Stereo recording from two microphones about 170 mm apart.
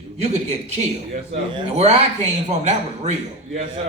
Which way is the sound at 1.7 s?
40° right (ahead or behind).